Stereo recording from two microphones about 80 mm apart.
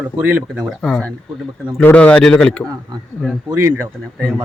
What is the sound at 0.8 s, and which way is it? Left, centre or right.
A man's voice, centre.